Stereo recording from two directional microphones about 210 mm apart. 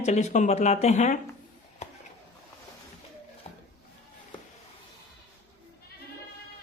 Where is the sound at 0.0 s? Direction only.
35° left (ahead or behind).